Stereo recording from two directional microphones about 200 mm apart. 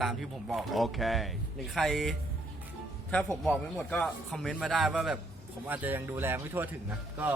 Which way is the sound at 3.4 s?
5° left (ahead or behind).